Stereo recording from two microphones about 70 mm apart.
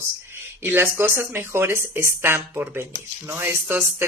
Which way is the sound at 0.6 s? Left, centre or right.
Right.